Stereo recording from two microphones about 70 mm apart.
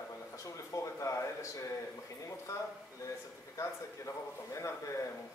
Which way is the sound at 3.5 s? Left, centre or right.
Left.